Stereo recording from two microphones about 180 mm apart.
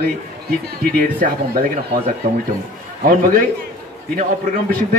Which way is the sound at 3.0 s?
50° right (ahead or behind).